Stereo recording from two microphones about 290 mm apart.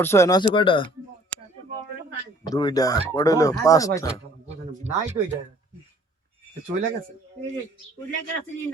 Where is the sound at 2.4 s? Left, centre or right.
Centre.